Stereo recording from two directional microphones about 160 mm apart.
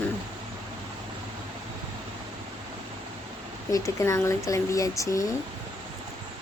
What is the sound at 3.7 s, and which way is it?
Speech, 20° left (ahead or behind).